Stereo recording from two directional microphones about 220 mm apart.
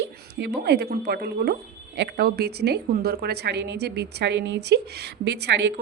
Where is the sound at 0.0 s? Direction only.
50° right (ahead or behind).